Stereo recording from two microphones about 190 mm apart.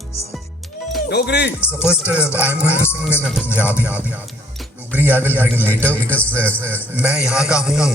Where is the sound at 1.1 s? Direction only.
60° left (ahead or behind).